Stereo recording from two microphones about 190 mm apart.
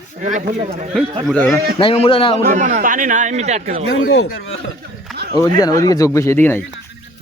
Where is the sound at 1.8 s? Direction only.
30° left (ahead or behind).